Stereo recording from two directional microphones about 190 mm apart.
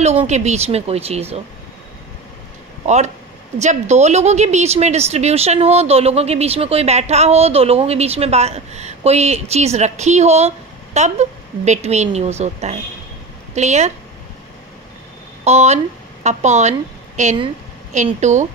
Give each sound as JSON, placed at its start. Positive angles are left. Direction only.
{"t": 0.0, "sound": "speech", "side_deg": -35}
{"t": 3.5, "sound": "speech", "side_deg": -35}
{"t": 15.4, "sound": "speech", "side_deg": -35}